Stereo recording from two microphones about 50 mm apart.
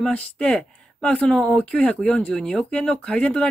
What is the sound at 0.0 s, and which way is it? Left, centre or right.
Speech, left.